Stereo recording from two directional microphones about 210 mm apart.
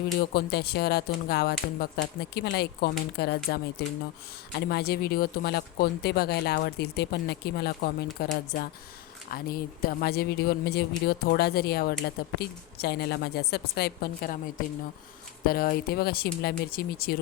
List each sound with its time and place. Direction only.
0.3 s speech: 50° left (ahead or behind)